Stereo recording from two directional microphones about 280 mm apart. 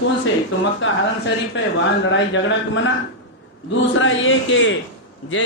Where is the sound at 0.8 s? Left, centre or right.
Left.